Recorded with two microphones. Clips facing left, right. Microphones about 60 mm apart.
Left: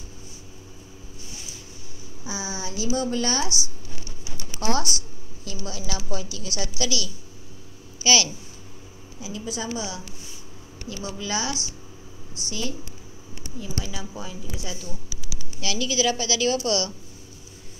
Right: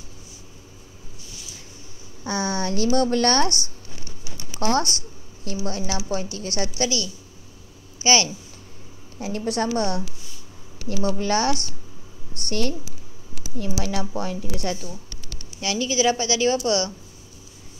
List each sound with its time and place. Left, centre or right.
2.2 s a woman's voice: right
4.6 s a sound: right
6.0 s a woman's voice: right
9.2 s a woman's voice: right
11.1 s a woman's voice: right
13.4 s a woman's voice: right
15.1 s a sound: centre
15.6 s a woman's voice: right